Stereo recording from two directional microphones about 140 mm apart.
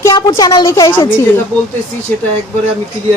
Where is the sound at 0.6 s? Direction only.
20° left (ahead or behind).